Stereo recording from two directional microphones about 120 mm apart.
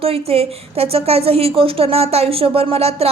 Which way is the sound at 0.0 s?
55° right (ahead or behind).